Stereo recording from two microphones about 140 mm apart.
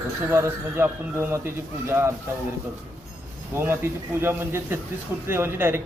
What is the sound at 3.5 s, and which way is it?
A man's voice, 15° right (ahead or behind).